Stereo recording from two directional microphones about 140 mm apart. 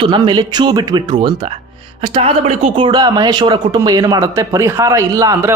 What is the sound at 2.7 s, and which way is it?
Speech, 35° right (ahead or behind).